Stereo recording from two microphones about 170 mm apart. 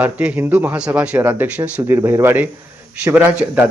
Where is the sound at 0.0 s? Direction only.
10° right (ahead or behind).